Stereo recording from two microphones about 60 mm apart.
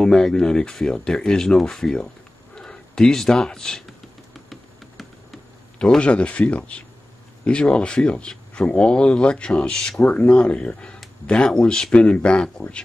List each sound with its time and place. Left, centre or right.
0.0 s speech: centre
4.5 s insect: centre
5.9 s speech: centre
10.0 s speech: left